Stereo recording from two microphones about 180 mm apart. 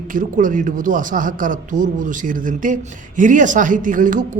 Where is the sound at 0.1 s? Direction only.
45° right (ahead or behind).